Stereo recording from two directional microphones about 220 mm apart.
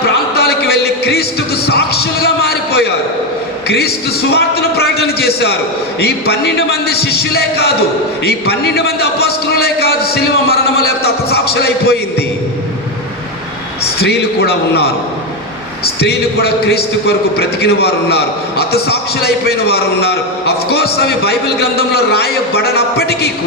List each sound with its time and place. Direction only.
0.0 s a sound: 45° left (ahead or behind)
2.2 s music: 45° left (ahead or behind)
3.7 s a man's voice: 45° left (ahead or behind)
14.0 s a man's voice: 45° left (ahead or behind)